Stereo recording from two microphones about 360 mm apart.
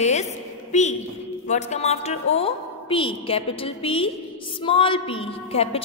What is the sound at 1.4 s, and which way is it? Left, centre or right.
A woman's voice, centre.